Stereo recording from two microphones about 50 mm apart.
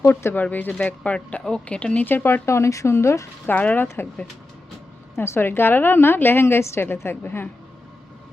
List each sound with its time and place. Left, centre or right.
0.0 s a woman's voice: left
0.7 s speech: left
2.2 s speech: left
2.9 s speech: left
3.4 s speech: left
4.0 s a woman's voice: left
5.1 s a woman's voice: left